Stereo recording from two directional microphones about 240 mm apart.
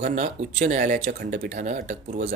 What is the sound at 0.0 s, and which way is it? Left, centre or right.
A man's voice, right.